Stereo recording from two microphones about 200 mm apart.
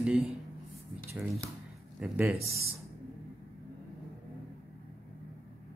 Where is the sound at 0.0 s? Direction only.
5° right (ahead or behind).